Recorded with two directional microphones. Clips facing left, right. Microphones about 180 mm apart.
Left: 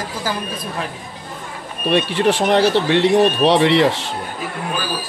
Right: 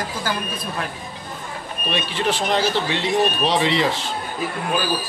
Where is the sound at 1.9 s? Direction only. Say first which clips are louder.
Left 7 dB; 65° left (ahead or behind).